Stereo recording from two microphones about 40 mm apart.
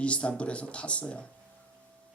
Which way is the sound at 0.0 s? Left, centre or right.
Left.